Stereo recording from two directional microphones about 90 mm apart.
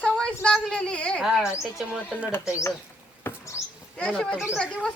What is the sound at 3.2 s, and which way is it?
Rodents, 35° left (ahead or behind).